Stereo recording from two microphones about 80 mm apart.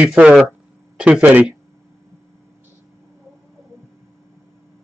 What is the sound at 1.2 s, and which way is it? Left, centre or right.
Speech, centre.